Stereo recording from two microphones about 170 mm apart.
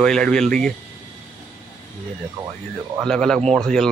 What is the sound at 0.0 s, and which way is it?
Speech, 5° left (ahead or behind).